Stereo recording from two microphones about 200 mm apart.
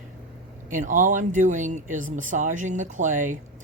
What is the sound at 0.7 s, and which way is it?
Speech, 40° right (ahead or behind).